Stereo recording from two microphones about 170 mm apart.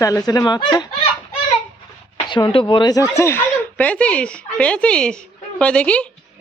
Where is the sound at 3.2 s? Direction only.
10° left (ahead or behind).